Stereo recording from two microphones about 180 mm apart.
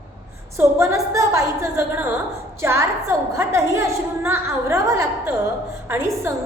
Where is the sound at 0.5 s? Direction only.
15° right (ahead or behind).